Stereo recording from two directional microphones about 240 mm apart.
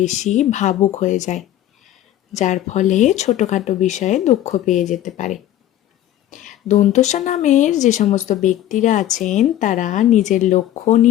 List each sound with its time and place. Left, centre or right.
0.0 s speech: left
6.3 s speech: left